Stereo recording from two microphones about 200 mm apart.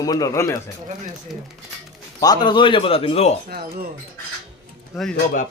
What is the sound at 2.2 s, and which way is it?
Speech, 20° left (ahead or behind).